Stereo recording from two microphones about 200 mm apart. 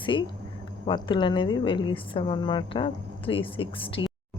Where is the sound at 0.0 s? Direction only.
25° left (ahead or behind).